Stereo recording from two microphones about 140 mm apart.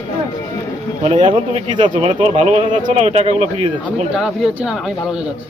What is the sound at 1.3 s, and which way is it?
Speech, 35° right (ahead or behind).